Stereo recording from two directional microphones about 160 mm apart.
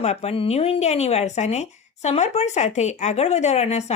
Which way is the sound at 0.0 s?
40° left (ahead or behind).